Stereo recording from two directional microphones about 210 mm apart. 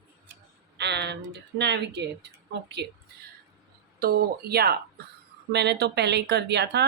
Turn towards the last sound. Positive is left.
turn(degrees=-55)  # may be behind; listen again after turning